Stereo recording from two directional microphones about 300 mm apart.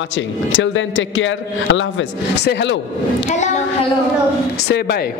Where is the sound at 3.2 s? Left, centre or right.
Left.